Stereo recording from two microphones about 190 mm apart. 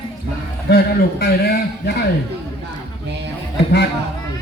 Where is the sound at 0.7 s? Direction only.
55° left (ahead or behind).